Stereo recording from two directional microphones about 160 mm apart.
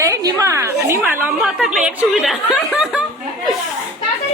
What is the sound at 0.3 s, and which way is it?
A woman's voice, 20° right (ahead or behind).